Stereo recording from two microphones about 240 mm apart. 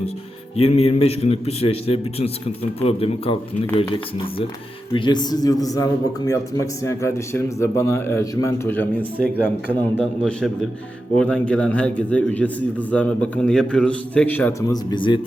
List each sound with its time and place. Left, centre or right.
0.6 s a man's voice: left; by 9.2 s centre
10.2 s a man's voice: centre